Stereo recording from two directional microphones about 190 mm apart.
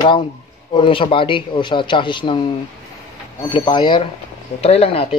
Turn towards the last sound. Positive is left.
turn(degrees=30)  # may be behind; listen again after turning